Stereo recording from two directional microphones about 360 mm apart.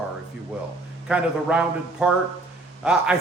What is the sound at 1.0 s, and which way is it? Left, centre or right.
A man's voice, centre.